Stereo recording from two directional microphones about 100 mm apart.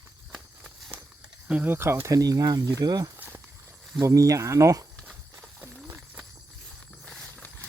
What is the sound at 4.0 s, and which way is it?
Speech, 35° right (ahead or behind).